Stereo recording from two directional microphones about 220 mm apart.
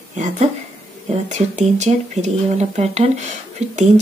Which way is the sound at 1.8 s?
30° right (ahead or behind).